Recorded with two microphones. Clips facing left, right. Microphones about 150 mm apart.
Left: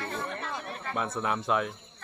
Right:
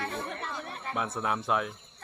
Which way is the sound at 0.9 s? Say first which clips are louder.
Left 1 dB; 5° right (ahead or behind).